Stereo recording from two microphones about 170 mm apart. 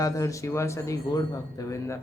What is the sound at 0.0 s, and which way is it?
Speech, 20° left (ahead or behind).